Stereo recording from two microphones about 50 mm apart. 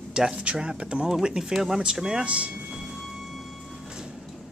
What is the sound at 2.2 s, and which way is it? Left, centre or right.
Speech, right.